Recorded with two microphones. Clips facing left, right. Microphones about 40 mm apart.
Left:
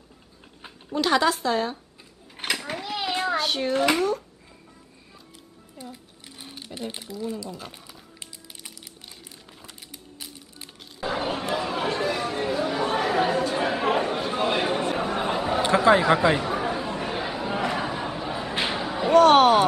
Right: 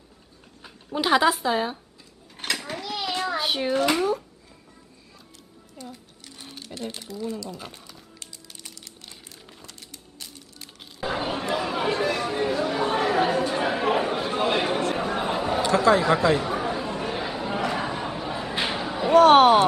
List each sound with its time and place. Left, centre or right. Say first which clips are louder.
0.9 s a woman's voice: right 1 dB; centre
2.3 s a sound: left 1 dB; centre
3.3 s a child's voice: even; centre
5.8 s sewing machine: even; centre
6.9 s speech: even; centre
7.4 s speech: even; centre
9.6 s music: left 1 dB; centre
11.0 s a sound: even; centre
11.5 s chatter: right 3 dB; centre
14.8 s chatter: even; centre
15.0 s a sound: even; centre
15.6 s speech: left 1 dB; left
16.4 s chatter: even; centre